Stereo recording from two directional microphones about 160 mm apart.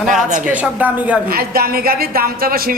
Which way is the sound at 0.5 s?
10° right (ahead or behind).